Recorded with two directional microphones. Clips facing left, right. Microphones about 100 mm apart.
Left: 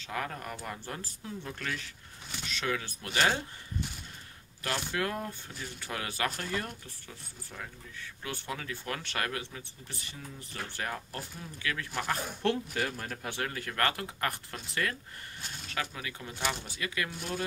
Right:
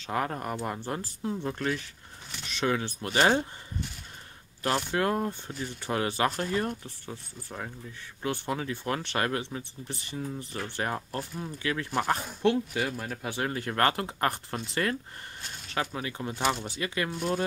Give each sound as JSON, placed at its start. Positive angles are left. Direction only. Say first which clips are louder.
{"t": 0.0, "sound": "speech", "louder": "right 6 dB", "side_deg": -35}
{"t": 4.9, "sound": "speech", "louder": "right 6 dB", "side_deg": -35}
{"t": 12.4, "sound": "speech", "louder": "right 5 dB", "side_deg": -10}
{"t": 13.4, "sound": "speech", "louder": "right 5 dB", "side_deg": -30}